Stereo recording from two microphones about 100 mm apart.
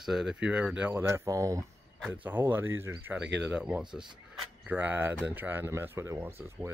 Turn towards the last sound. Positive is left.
turn(degrees=-25)  # may be behind; listen again after turning